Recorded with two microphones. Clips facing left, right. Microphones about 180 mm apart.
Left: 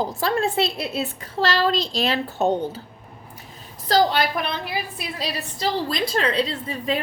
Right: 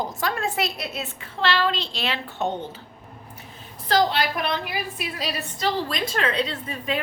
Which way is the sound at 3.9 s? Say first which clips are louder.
Left 2 dB; 40° left (ahead or behind).